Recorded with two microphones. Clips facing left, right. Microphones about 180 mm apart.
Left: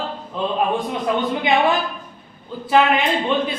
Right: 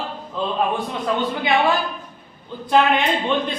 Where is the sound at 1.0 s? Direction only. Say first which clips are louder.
Left 1 dB; 20° left (ahead or behind).